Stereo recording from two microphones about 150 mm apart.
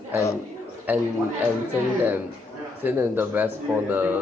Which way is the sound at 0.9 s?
10° right (ahead or behind).